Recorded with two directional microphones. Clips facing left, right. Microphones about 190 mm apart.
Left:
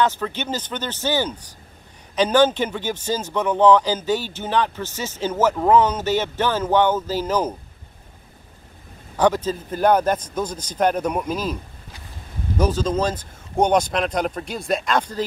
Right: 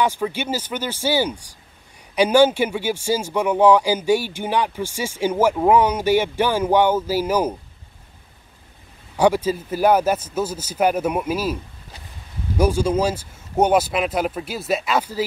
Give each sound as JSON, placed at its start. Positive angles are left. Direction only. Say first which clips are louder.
{"t": 0.0, "sound": "speech", "louder": "right 1 dB", "side_deg": -10}
{"t": 9.1, "sound": "speech", "louder": "right 2 dB", "side_deg": -10}
{"t": 12.5, "sound": "speech", "louder": "right 2 dB", "side_deg": -10}